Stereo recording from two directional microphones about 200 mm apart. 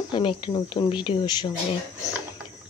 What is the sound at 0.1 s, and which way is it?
Speech, 25° left (ahead or behind).